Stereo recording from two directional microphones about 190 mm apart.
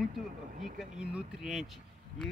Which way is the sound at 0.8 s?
5° right (ahead or behind).